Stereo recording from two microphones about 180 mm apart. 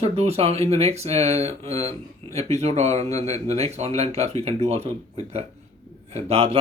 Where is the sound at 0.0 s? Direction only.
35° right (ahead or behind).